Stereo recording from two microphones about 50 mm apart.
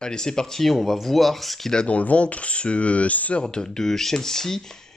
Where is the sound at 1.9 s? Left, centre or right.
Left.